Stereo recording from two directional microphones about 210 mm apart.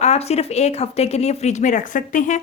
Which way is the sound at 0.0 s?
30° left (ahead or behind).